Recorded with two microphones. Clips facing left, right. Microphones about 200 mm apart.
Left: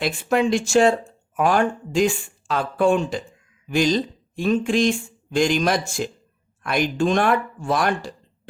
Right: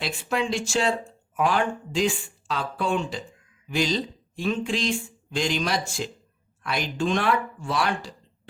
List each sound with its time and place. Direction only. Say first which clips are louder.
0.0 s speech: left 7 dB; 50° left (ahead or behind)